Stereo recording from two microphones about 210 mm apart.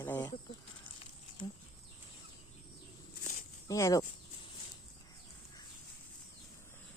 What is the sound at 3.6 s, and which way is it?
Speech, 15° left (ahead or behind).